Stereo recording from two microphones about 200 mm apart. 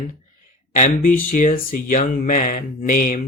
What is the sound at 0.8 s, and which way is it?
Speech, 35° left (ahead or behind).